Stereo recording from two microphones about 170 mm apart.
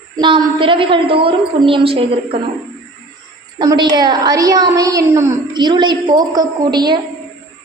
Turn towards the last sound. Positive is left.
turn(degrees=-25)  # may be behind; listen again after turning